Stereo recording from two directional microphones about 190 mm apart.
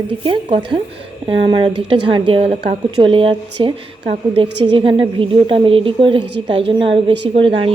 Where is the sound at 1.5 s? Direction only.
25° right (ahead or behind).